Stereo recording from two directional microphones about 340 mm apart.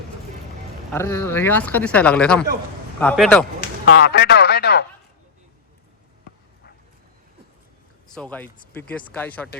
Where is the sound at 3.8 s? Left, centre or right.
Left.